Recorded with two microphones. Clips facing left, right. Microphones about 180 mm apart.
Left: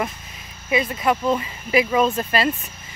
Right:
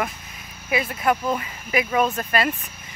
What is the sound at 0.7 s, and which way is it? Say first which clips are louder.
Speech: left 2 dB; 5° right (ahead or behind).